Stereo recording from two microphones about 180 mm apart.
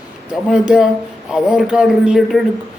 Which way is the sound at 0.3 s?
5° right (ahead or behind).